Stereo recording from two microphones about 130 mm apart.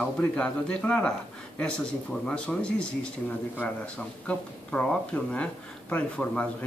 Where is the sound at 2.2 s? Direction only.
5° left (ahead or behind).